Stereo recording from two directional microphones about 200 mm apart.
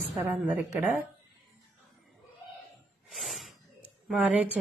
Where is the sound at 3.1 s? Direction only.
Centre (ahead or behind).